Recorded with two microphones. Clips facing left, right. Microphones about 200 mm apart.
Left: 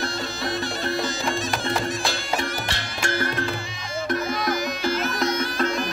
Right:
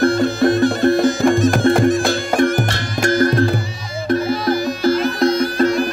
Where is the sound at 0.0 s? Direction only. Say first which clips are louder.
Right 15 dB; 55° right (ahead or behind).